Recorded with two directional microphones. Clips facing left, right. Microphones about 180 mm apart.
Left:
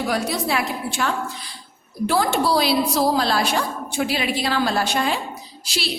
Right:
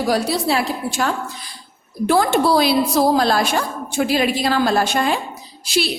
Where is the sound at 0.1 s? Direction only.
30° right (ahead or behind).